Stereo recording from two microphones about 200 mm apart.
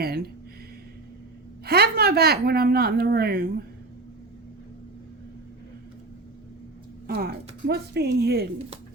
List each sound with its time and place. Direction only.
1.6 s a woman's voice: 50° right (ahead or behind)
7.1 s a woman's voice: 50° right (ahead or behind)